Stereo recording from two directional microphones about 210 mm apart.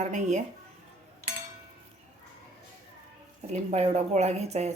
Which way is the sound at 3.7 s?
30° right (ahead or behind).